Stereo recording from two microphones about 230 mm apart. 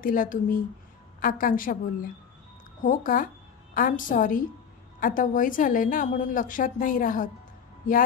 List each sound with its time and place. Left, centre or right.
0.0 s a woman's voice: left
2.8 s a woman's voice: left